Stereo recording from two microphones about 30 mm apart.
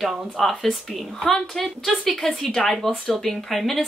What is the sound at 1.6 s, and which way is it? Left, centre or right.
Speech, centre.